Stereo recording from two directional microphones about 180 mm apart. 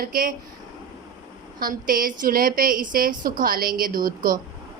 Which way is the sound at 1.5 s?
50° right (ahead or behind).